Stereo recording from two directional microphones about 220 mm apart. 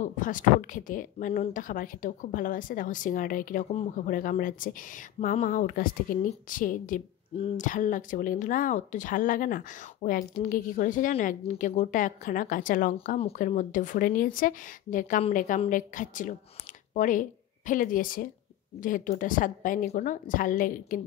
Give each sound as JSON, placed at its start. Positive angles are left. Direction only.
{"t": 0.0, "sound": "a woman's voice", "side_deg": 35}